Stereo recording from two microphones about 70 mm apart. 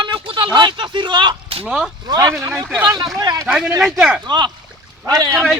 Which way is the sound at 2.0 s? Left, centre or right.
Right.